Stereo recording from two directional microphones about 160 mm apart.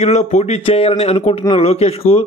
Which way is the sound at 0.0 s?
45° left (ahead or behind).